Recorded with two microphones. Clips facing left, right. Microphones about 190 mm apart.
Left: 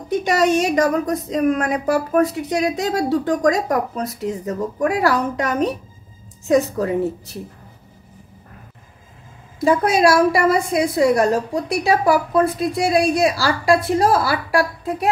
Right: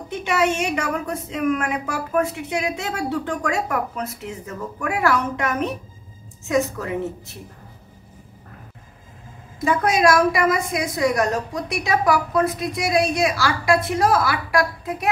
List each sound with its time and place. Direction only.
0.1 s a woman's voice: 40° left (ahead or behind)
9.7 s a woman's voice: 35° left (ahead or behind)